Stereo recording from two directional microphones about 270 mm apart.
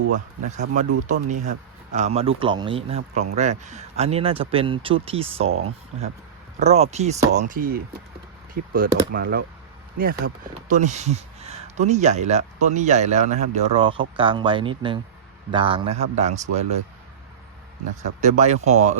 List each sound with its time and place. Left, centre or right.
0.4 s speech: right
6.6 s speech: right
17.8 s speech: right